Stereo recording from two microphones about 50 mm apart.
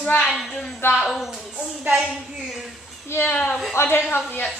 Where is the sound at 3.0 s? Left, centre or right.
Left.